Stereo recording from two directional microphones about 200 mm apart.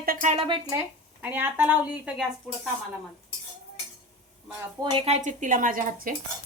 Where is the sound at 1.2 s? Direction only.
10° right (ahead or behind).